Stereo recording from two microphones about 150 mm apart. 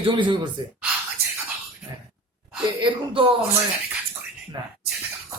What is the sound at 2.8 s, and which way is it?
Speech, 35° right (ahead or behind).